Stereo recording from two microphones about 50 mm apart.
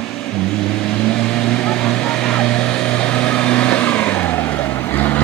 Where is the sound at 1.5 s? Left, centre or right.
Centre.